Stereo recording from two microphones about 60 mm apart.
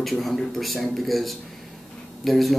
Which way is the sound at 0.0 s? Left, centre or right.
Centre.